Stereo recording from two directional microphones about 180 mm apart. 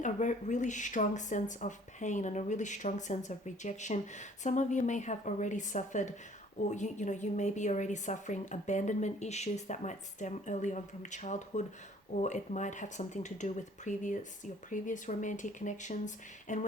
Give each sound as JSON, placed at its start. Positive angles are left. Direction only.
{"t": 0.0, "sound": "a woman's voice", "side_deg": 45}